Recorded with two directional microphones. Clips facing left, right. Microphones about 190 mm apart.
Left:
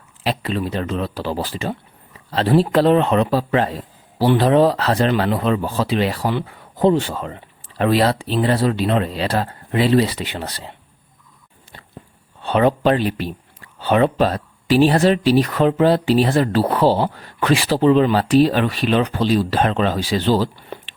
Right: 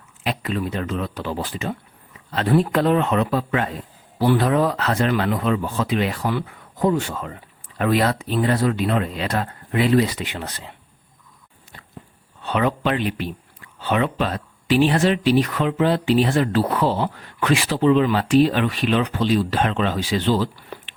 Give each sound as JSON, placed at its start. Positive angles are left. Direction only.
{"t": 0.2, "sound": "speech", "side_deg": 30}
{"t": 12.4, "sound": "speech", "side_deg": 30}